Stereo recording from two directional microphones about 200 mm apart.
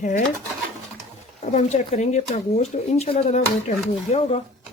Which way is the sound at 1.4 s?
35° left (ahead or behind).